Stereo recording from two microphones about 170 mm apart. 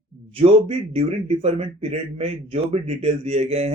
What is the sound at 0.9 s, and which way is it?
Speech, 40° right (ahead or behind).